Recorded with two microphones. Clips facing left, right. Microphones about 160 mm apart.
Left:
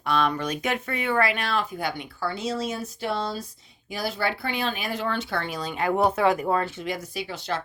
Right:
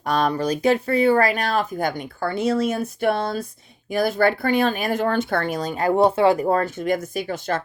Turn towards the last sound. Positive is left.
turn(degrees=-50)  # may be behind; listen again after turning